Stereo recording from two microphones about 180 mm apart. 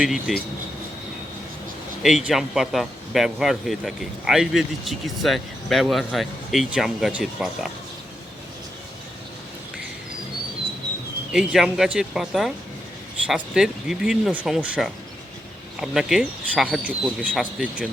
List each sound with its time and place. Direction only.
0.0 s speech: 5° right (ahead or behind)
2.0 s speech: centre (ahead or behind)
11.3 s speech: 5° right (ahead or behind)